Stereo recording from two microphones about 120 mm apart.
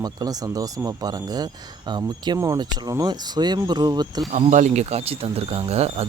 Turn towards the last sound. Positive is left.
turn(degrees=-60)  # may be behind; listen again after turning